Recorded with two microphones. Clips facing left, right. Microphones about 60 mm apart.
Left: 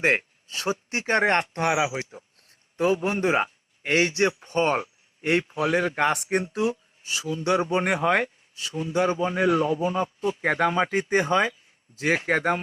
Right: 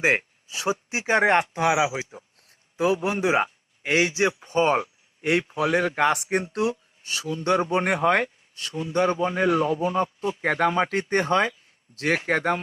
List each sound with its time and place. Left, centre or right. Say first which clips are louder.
0.0 s a sound: right 1 dB; centre
0.9 s speech: right 2 dB; centre
7.3 s speech: right 1 dB; right
7.7 s speech: right 1 dB; centre
9.3 s speech: even; right
10.4 s speech: right 1 dB; centre